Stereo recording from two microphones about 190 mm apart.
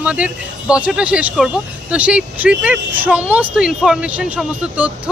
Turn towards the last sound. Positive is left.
turn(degrees=-5)  # may be behind; listen again after turning